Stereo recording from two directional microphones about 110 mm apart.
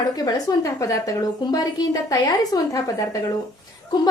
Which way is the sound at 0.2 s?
35° left (ahead or behind).